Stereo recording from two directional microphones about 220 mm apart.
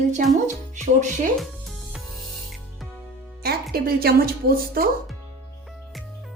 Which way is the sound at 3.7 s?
45° right (ahead or behind).